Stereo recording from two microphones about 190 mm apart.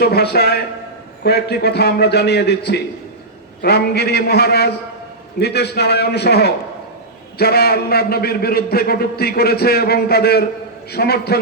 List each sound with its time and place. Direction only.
0.0 s a man's voice: 55° left (ahead or behind)